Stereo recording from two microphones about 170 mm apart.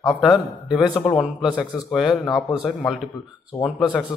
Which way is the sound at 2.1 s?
20° left (ahead or behind).